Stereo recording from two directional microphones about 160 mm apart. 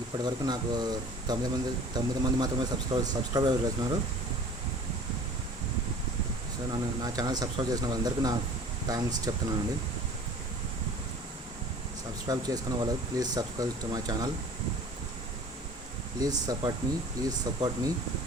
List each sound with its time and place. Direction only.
0.2 s speech: 25° right (ahead or behind)
6.7 s speech: 25° right (ahead or behind)
12.3 s speech: 25° right (ahead or behind)
16.2 s speech: 25° right (ahead or behind)